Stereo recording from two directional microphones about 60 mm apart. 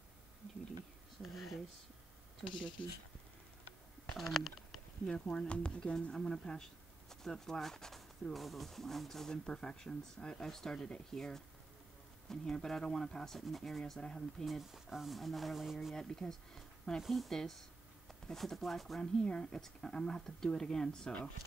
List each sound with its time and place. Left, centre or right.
1.3 s speech: centre
2.4 s speech: centre
4.2 s speech: centre
5.0 s speech: centre
16.0 s speech: centre